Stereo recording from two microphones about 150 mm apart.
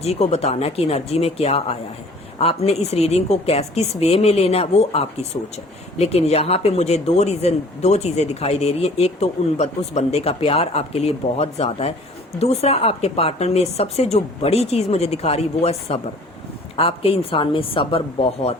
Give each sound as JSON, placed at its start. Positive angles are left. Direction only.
{"t": 0.0, "sound": "a woman's voice", "side_deg": 45}